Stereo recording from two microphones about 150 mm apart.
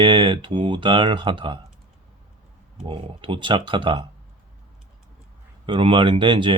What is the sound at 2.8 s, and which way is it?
Speech, 35° right (ahead or behind).